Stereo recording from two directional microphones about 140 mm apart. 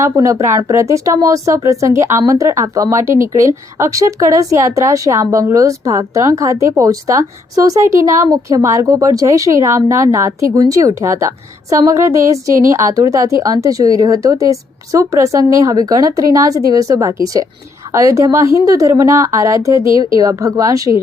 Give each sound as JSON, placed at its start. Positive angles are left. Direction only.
{"t": 0.0, "sound": "speech", "side_deg": -20}